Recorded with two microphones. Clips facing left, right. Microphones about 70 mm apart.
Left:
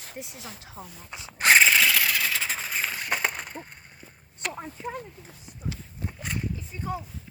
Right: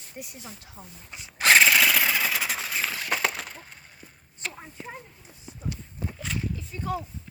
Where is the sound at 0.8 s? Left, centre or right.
Left.